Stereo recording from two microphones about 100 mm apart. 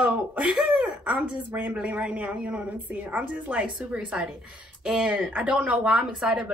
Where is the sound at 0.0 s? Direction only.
15° right (ahead or behind).